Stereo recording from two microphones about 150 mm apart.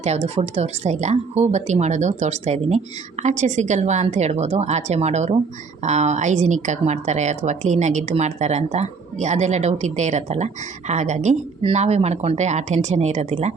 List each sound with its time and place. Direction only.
0.0 s a woman's voice: 45° right (ahead or behind)